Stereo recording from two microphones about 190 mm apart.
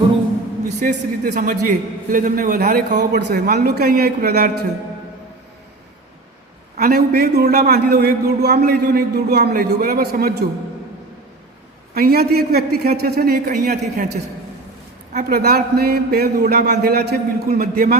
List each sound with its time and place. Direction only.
0.8 s a man's voice: 40° right (ahead or behind)
3.1 s a man's voice: 60° right (ahead or behind)
6.7 s a man's voice: 50° right (ahead or behind)
11.9 s a man's voice: 55° right (ahead or behind)
15.1 s a man's voice: 50° right (ahead or behind)